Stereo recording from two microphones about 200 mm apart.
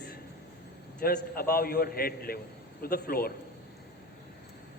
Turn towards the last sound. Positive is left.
turn(degrees=50)  # may be behind; listen again after turning